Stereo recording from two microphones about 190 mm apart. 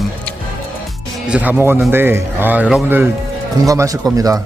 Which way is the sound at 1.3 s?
10° right (ahead or behind).